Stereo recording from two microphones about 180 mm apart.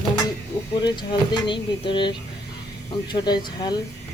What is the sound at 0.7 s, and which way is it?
Speech, 25° left (ahead or behind).